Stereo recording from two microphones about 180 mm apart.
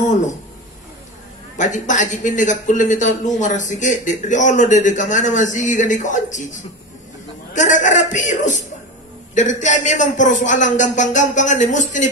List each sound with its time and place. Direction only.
0.1 s speech: 40° left (ahead or behind)
1.6 s speech: 45° left (ahead or behind)